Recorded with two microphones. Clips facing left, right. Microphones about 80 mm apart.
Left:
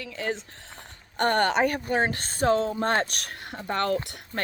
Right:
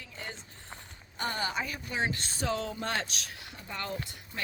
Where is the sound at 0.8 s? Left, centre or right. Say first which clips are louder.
Left 11 dB; left.